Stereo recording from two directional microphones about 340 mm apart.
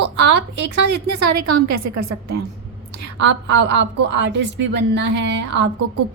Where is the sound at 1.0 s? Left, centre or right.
Right.